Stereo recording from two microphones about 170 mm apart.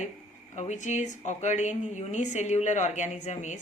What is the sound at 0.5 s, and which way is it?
A woman's voice, 45° left (ahead or behind).